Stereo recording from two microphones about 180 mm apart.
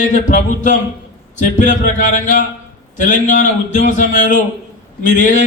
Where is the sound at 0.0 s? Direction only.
45° left (ahead or behind).